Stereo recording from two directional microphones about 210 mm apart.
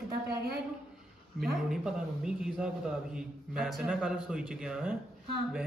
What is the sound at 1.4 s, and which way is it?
A man's voice, centre (ahead or behind).